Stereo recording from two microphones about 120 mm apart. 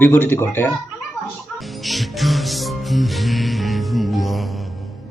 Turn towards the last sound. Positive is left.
turn(degrees=0)  # may be behind; listen again after turning